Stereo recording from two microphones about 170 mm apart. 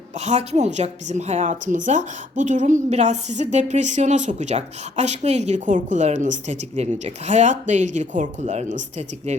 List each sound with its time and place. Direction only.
0.1 s a woman's voice: 40° right (ahead or behind)